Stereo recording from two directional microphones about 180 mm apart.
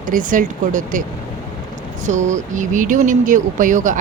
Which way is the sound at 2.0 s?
40° right (ahead or behind).